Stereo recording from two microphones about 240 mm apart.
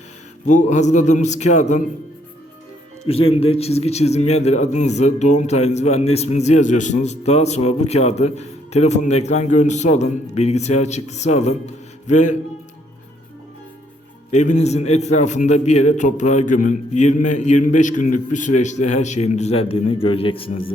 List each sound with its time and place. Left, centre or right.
0.4 s a man's voice: left
3.1 s a man's voice: left
14.3 s a man's voice: left